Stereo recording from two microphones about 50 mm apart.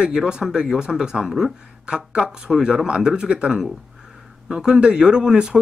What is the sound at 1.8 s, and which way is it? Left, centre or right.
Speech, centre.